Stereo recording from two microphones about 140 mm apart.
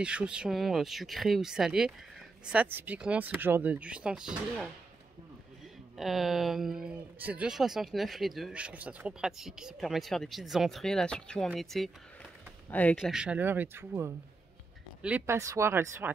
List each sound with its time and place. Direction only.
0.0 s speech: 5° right (ahead or behind)
5.9 s speech: centre (ahead or behind)
13.0 s speech: 5° right (ahead or behind)